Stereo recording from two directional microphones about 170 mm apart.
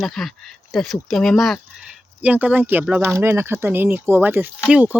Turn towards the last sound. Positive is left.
turn(degrees=-10)  # may be behind; listen again after turning